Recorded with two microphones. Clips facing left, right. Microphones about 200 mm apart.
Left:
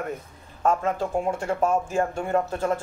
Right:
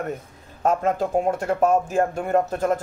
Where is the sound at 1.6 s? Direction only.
55° right (ahead or behind).